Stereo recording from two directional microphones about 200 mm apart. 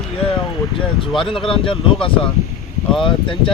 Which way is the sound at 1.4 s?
25° left (ahead or behind).